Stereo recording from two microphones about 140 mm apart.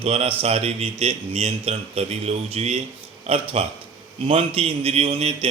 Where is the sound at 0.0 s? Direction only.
45° right (ahead or behind).